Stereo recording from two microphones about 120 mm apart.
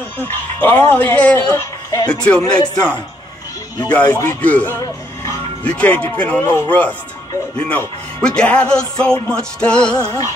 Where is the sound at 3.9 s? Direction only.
15° left (ahead or behind).